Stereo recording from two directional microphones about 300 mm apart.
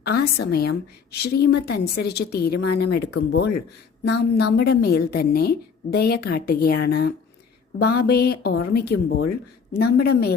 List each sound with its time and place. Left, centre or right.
0.0 s a woman's voice: left